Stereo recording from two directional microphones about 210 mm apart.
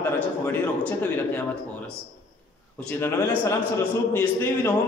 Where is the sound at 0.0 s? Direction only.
10° left (ahead or behind).